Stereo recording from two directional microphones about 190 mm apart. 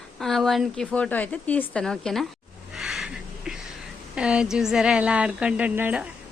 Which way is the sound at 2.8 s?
Centre (ahead or behind).